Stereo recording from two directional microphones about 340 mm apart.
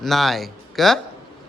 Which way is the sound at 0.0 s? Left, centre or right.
Centre.